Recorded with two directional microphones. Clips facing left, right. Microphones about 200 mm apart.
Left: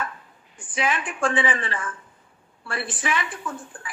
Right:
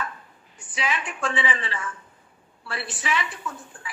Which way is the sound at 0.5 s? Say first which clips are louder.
Left 3 dB; 50° left (ahead or behind).